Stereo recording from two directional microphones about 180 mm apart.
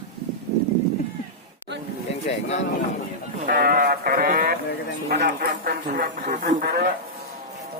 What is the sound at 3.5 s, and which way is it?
Sheep, 55° right (ahead or behind).